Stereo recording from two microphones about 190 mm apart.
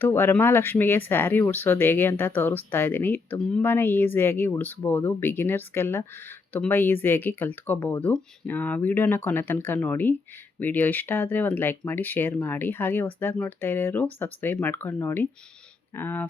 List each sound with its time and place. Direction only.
0.0 s speech: 10° left (ahead or behind)